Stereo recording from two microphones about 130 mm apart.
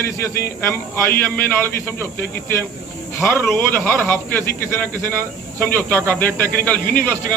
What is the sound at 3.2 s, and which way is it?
A man's voice, 15° left (ahead or behind).